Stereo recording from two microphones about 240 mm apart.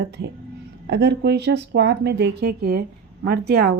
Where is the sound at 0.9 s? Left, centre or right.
Right.